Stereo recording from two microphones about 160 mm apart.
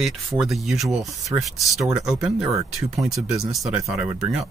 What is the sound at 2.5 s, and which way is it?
Speech, 20° right (ahead or behind).